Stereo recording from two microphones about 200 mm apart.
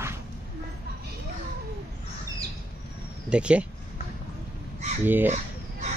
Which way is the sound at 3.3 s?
5° right (ahead or behind).